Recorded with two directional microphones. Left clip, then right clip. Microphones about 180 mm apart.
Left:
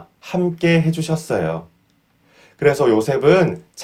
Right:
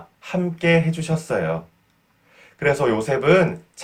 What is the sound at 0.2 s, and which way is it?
Speech, 35° left (ahead or behind).